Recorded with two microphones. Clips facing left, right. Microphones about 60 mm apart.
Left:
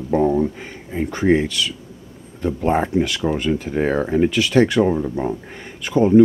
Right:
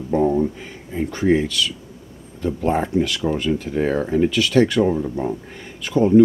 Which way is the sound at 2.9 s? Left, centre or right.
Centre.